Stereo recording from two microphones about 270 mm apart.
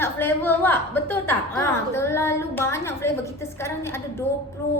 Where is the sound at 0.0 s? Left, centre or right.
Centre.